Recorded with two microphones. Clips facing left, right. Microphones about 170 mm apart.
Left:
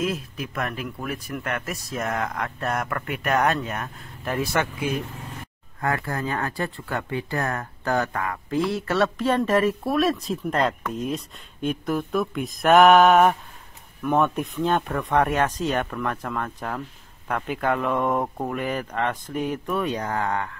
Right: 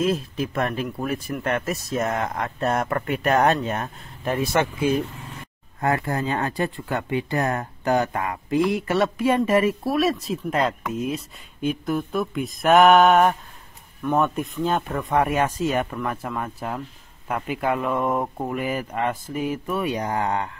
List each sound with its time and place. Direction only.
0.0 s speech: 30° right (ahead or behind)